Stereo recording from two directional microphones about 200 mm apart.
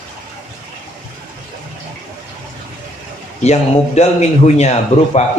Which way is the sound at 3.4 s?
35° left (ahead or behind).